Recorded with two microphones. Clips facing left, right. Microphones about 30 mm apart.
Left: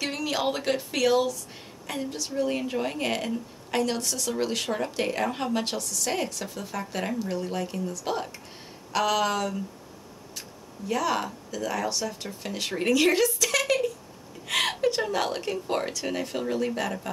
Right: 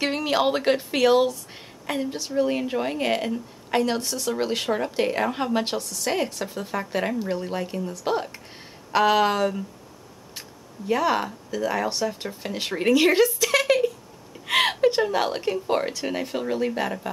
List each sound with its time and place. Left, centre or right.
0.0 s speech: right
1.9 s a woman's voice: centre
10.9 s a woman's voice: right
13.4 s a sound: right
15.0 s a woman's voice: centre